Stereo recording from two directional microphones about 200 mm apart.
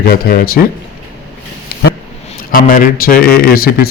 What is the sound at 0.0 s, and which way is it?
Speech, 50° left (ahead or behind).